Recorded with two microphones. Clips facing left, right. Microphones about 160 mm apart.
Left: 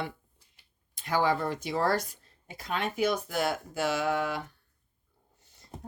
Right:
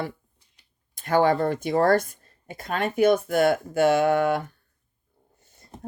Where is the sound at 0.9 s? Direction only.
55° right (ahead or behind).